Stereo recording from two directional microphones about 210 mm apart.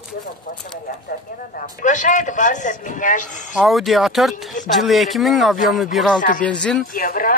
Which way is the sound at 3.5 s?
Centre (ahead or behind).